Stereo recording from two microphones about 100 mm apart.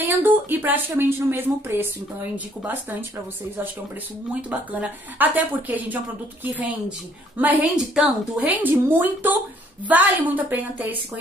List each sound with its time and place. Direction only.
0.0 s speech: 20° right (ahead or behind)
4.3 s a woman's voice: 15° right (ahead or behind)
7.3 s a woman's voice: 15° right (ahead or behind)
7.8 s speech: 5° right (ahead or behind)
8.4 s a woman's voice: 15° right (ahead or behind)